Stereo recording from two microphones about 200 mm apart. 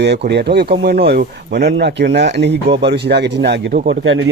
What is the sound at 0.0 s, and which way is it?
Speech, 55° right (ahead or behind).